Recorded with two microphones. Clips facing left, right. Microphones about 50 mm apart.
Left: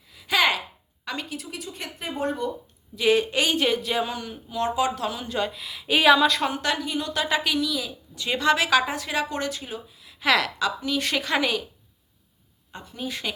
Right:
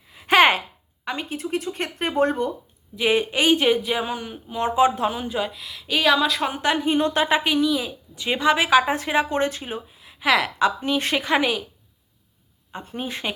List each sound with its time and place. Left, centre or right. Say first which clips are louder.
0.1 s a sound: right 6 dB; right
1.0 s a woman's voice: right 3 dB; right
1.3 s speech: right 8 dB; right
2.9 s a woman's voice: even; right
5.3 s speech: right 1 dB; centre
6.1 s speech: left 1 dB; centre
6.5 s a woman's voice: right 5 dB; right
10.2 s a woman's voice: right 2 dB; centre
10.6 s a woman's voice: right 4 dB; right
12.8 s speech: right 2 dB; right